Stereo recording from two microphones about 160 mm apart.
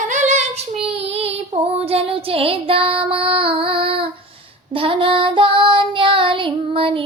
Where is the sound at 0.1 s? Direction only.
50° right (ahead or behind).